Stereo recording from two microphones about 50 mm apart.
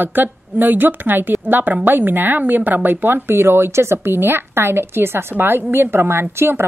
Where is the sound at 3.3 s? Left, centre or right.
Right.